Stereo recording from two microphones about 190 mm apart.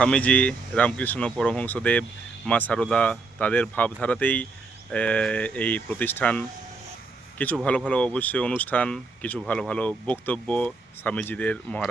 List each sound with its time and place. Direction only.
0.0 s speech: 5° left (ahead or behind)